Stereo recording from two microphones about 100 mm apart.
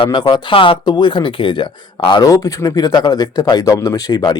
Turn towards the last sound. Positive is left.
turn(degrees=40)  # may be behind; listen again after turning